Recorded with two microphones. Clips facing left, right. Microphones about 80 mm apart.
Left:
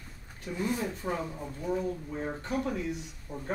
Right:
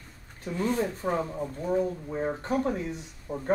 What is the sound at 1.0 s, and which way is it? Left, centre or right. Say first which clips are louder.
Speech: right 5 dB; right.